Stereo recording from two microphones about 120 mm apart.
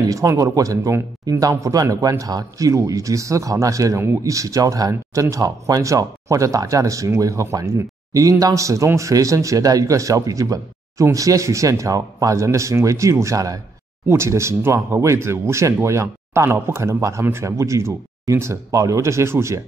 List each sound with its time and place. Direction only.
0.1 s speech: 25° right (ahead or behind)